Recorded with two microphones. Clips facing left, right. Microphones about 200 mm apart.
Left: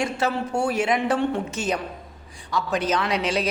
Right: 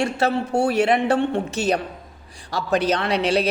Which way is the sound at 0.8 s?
65° right (ahead or behind).